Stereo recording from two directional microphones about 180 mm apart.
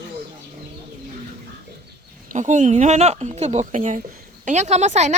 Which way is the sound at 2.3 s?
45° right (ahead or behind).